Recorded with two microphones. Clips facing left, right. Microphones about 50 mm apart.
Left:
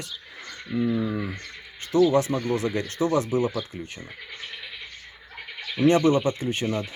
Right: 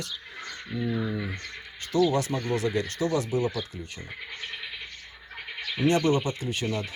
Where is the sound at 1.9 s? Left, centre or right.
Left.